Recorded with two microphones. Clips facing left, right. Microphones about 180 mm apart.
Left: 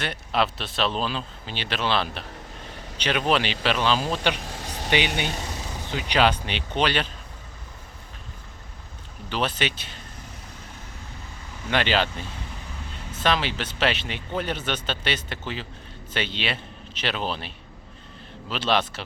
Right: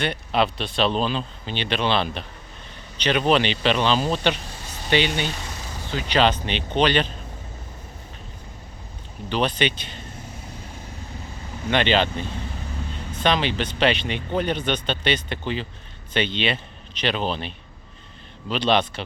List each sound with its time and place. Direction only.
0.0 s speech: centre (ahead or behind)
4.4 s vehicle: 90° left
4.9 s speech: 15° left (ahead or behind)
9.3 s speech: 5° left (ahead or behind)
11.7 s speech: 5° left (ahead or behind)